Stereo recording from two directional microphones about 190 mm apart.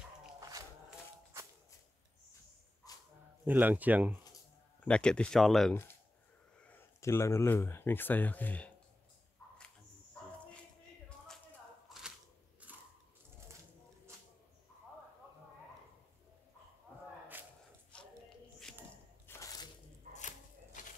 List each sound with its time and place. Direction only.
0.4 s crowd: 20° right (ahead or behind)
2.8 s dog: 20° left (ahead or behind)
3.4 s speech: 10° right (ahead or behind)
4.8 s speech: 5° left (ahead or behind)
12.6 s mechanisms: 5° right (ahead or behind)
17.9 s a sound: 5° left (ahead or behind)
19.2 s biting: 15° left (ahead or behind)
20.2 s a sound: 40° left (ahead or behind)